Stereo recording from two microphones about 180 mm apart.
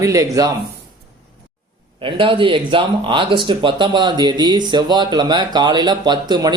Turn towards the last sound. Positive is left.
turn(degrees=-25)  # may be behind; listen again after turning